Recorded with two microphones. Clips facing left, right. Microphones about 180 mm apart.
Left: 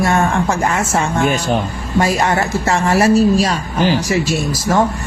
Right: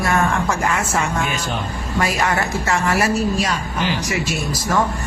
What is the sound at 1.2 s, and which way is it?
Speech, 45° left (ahead or behind).